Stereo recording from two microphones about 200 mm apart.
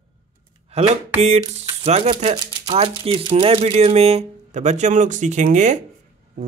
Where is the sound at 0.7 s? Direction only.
30° right (ahead or behind).